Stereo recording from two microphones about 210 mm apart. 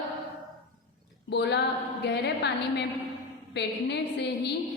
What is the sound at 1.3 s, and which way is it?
A woman's voice, 55° left (ahead or behind).